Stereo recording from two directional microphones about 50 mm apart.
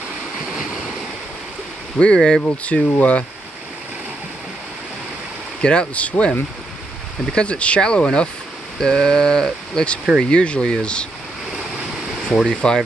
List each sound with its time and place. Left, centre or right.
2.0 s speech: centre
2.5 s speech: left
5.6 s speech: centre
7.3 s speech: left
8.8 s a sound: centre
10.3 s speech: left
12.3 s speech: centre